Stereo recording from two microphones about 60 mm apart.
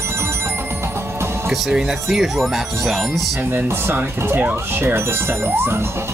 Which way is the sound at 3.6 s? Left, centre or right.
Right.